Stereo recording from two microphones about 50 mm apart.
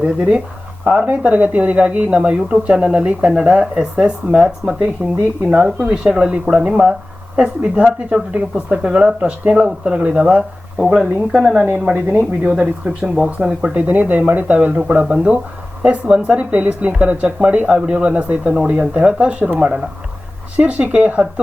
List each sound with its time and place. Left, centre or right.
0.0 s speech: right
5.0 s speech: right
5.5 s speech: centre
11.9 s speech: right
12.5 s speech: right
13.6 s speech: right
19.5 s speech: centre
20.6 s speech: right